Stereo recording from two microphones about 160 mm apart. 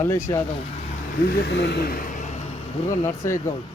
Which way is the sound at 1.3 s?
90° left.